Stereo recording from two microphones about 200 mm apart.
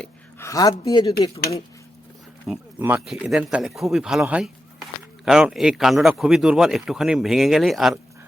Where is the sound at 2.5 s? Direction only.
5° right (ahead or behind).